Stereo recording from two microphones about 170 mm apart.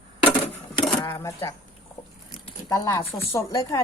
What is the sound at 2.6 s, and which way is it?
Speech, 25° left (ahead or behind).